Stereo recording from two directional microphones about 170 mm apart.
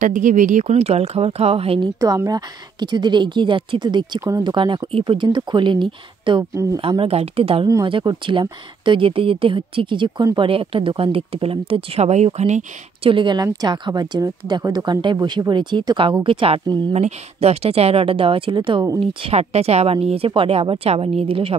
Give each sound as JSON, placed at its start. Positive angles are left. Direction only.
{"t": 0.0, "sound": "speech", "side_deg": -50}
{"t": 2.0, "sound": "a woman's voice", "side_deg": -20}
{"t": 6.8, "sound": "speech", "side_deg": -35}
{"t": 7.6, "sound": "speech", "side_deg": -25}
{"t": 13.1, "sound": "a woman's voice", "side_deg": -25}